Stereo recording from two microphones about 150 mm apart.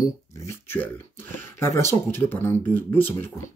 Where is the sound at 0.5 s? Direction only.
15° left (ahead or behind).